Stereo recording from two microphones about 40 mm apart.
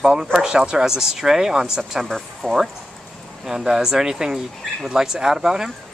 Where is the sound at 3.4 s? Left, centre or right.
Centre.